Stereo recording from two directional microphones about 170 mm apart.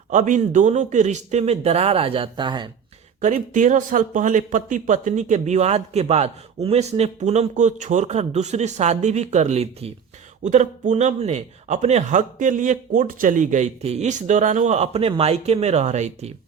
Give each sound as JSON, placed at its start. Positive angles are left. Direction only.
{"t": 0.1, "sound": "speech", "side_deg": -50}
{"t": 3.2, "sound": "speech", "side_deg": -45}